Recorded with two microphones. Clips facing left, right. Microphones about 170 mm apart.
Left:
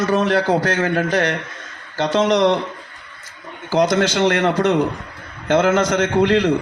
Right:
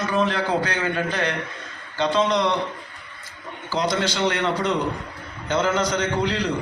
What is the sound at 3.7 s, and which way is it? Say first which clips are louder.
A man's voice: left 7 dB; 45° left (ahead or behind).